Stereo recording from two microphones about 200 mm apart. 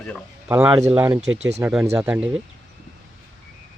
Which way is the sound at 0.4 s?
10° right (ahead or behind).